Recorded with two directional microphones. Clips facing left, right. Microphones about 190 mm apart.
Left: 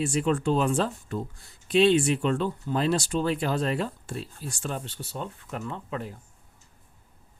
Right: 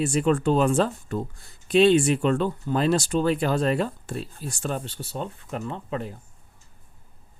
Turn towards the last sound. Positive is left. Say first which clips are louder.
# right 3 dB
turn(degrees=-30)  # may be behind; listen again after turning